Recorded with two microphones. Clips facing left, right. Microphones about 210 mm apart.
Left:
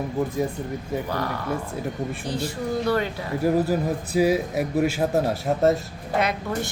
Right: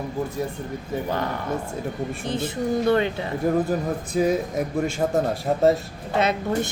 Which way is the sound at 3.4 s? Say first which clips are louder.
Left 1 dB; 5° left (ahead or behind).